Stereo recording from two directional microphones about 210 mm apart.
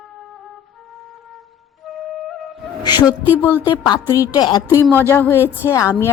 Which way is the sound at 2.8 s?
20° left (ahead or behind).